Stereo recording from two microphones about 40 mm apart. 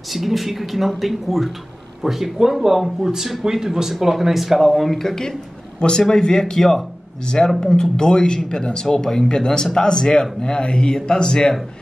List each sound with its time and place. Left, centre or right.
0.1 s a man's voice: centre